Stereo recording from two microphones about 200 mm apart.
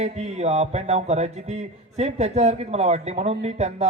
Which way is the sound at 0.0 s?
35° right (ahead or behind).